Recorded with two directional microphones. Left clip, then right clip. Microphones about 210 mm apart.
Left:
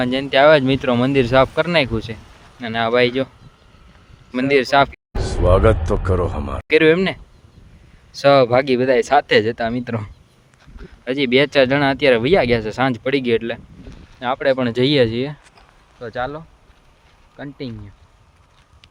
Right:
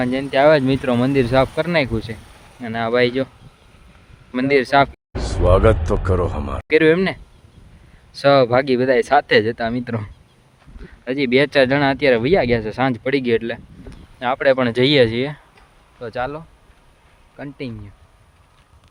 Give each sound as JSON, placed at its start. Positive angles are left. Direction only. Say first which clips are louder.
{"t": 0.0, "sound": "speech", "louder": "left 2 dB", "side_deg": 15}
{"t": 4.3, "sound": "speech", "louder": "even", "side_deg": 5}
{"t": 14.2, "sound": "speech", "louder": "right 2 dB", "side_deg": -15}
{"t": 16.0, "sound": "speech", "louder": "even", "side_deg": -5}